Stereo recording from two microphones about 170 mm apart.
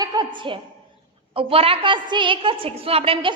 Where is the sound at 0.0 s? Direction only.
25° right (ahead or behind).